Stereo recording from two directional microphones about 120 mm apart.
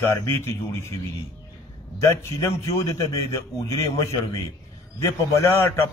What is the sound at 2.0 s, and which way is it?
A man's voice, 20° left (ahead or behind).